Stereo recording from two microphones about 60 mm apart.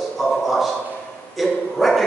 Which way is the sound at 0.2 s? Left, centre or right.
Centre.